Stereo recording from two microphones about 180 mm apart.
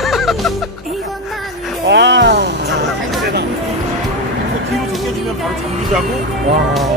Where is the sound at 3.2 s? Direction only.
65° right (ahead or behind).